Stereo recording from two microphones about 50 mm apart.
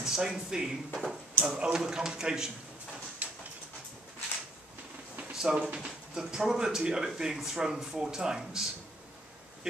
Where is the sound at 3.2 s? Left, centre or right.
Right.